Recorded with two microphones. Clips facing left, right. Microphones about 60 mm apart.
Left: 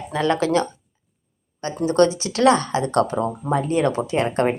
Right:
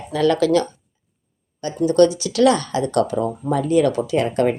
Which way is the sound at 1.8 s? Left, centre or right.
Left.